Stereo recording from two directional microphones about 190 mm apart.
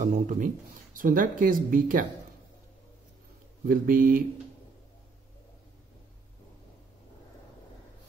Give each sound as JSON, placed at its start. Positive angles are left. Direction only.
{"t": 0.0, "sound": "speech", "side_deg": -40}
{"t": 3.6, "sound": "speech", "side_deg": -45}